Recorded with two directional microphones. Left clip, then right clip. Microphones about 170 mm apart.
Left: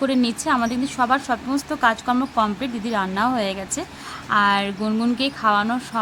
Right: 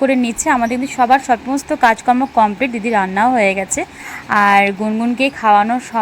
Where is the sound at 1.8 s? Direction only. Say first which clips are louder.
Right 7 dB; 25° right (ahead or behind).